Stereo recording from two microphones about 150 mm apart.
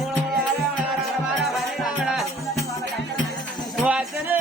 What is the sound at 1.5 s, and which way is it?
Music, centre (ahead or behind).